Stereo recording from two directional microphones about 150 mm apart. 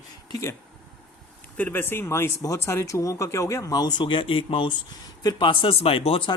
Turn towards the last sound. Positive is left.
turn(degrees=35)  # may be behind; listen again after turning